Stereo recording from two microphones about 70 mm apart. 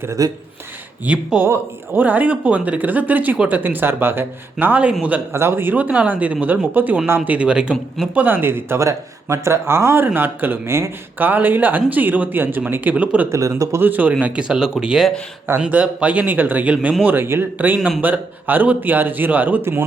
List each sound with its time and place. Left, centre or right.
0.2 s speech: right
1.0 s speech: centre; by 4.3 s right
4.6 s speech: right
5.3 s speech: right; by 7.8 s centre
8.1 s speech: right
8.8 s speech: right
13.3 s speech: right
13.8 s speech: right
15.6 s speech: centre
17.7 s speech: centre
18.0 s speech: right